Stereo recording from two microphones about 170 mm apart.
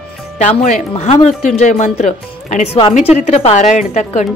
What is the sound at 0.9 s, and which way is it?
A woman's voice, 35° left (ahead or behind).